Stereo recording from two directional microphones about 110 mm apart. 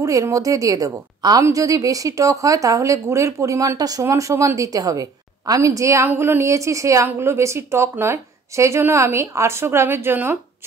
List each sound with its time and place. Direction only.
0.0 s a woman's voice: 30° right (ahead or behind)